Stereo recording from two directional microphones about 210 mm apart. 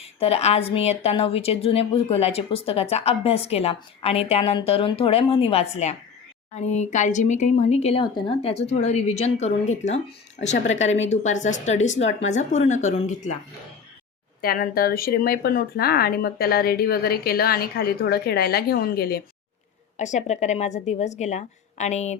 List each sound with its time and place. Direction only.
0.2 s a woman's voice: 30° left (ahead or behind)
14.4 s speech: 45° left (ahead or behind)
20.0 s speech: 35° left (ahead or behind)